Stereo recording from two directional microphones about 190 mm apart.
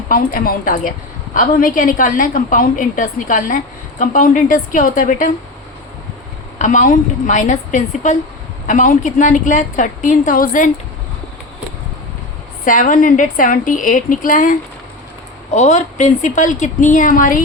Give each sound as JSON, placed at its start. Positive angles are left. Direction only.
{"t": 0.1, "sound": "a woman's voice", "side_deg": 50}
{"t": 6.6, "sound": "a woman's voice", "side_deg": 40}
{"t": 12.6, "sound": "a woman's voice", "side_deg": 45}